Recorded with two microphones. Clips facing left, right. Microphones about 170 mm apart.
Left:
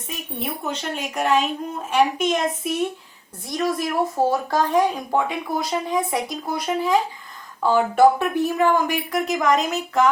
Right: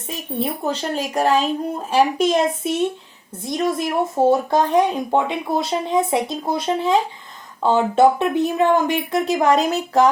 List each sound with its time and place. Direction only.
0.1 s a woman's voice: 35° right (ahead or behind)